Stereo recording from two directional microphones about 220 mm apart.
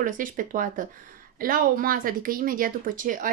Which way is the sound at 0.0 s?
40° right (ahead or behind).